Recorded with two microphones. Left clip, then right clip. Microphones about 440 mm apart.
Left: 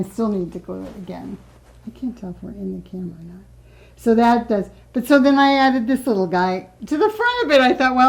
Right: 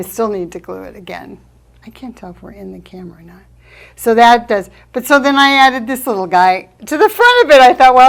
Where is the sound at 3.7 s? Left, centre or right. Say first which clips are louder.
Right 7 dB; right.